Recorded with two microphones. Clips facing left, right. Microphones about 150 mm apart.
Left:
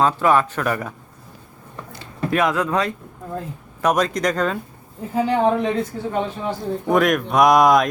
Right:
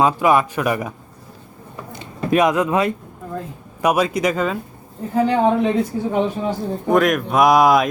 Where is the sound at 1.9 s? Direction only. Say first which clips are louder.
Right 4 dB; 20° right (ahead or behind).